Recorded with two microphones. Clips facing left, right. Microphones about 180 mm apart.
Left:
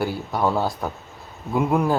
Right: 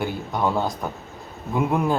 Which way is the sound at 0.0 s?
5° left (ahead or behind).